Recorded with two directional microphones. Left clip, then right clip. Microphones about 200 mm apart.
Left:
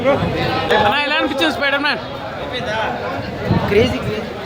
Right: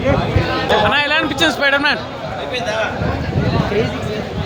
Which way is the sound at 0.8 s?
10° right (ahead or behind).